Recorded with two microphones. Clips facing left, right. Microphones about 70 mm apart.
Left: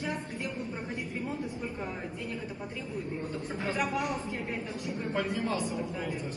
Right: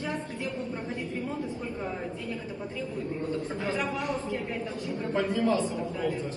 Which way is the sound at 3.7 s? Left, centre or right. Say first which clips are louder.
Left 1 dB; centre.